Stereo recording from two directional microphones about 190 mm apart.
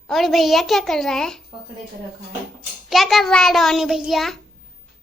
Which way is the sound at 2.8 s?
Centre (ahead or behind).